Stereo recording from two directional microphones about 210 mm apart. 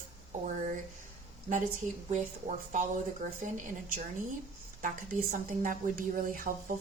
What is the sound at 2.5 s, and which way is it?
Speech, 35° right (ahead or behind).